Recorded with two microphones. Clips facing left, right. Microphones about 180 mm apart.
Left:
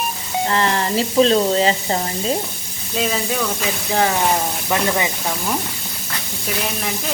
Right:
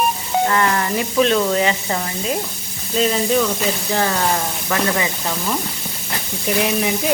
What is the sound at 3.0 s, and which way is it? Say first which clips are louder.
Speech: right 4 dB; centre (ahead or behind).